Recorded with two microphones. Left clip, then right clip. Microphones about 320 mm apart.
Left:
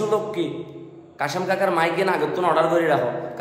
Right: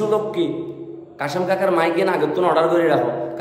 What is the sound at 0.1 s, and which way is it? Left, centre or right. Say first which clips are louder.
A man's voice: right 3 dB; centre.